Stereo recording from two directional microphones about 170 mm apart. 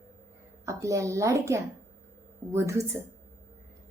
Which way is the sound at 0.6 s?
20° right (ahead or behind).